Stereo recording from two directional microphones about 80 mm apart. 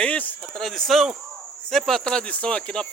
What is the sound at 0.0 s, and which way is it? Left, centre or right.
Speech, centre.